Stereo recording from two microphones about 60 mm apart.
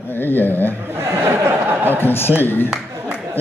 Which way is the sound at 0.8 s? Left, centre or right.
Right.